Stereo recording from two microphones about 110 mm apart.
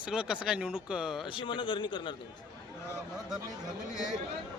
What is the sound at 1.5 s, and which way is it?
Speech, 50° left (ahead or behind).